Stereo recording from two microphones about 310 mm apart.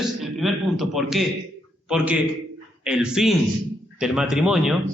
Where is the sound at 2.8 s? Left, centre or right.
Centre.